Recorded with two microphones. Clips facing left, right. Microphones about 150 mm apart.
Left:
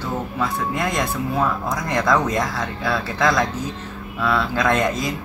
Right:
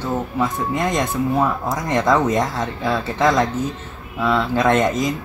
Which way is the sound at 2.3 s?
20° right (ahead or behind).